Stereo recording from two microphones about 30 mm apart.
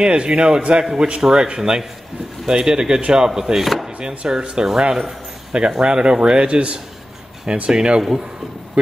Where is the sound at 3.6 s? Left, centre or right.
Centre.